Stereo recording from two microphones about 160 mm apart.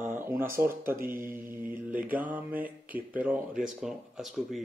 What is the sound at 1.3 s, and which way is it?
Speech, 15° right (ahead or behind).